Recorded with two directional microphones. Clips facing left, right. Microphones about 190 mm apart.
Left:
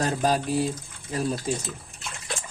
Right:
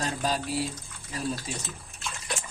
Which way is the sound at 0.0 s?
50° left (ahead or behind).